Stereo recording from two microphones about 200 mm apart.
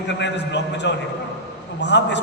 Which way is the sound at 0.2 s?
60° left (ahead or behind).